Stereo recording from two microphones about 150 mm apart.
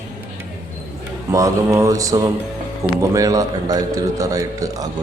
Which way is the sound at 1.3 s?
20° right (ahead or behind).